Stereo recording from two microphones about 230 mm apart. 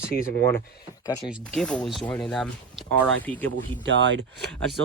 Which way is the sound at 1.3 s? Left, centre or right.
Centre.